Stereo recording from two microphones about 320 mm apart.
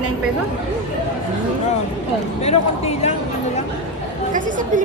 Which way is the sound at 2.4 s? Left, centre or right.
Centre.